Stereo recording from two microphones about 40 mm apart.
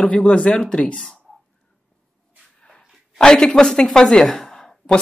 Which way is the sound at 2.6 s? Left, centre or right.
Centre.